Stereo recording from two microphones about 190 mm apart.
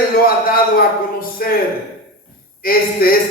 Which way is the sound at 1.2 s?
50° left (ahead or behind).